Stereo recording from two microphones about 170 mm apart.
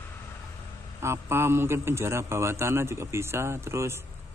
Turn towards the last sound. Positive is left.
turn(degrees=-15)  # may be behind; listen again after turning